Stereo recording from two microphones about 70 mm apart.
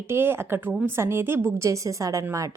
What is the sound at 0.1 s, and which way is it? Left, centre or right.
A woman's voice, right.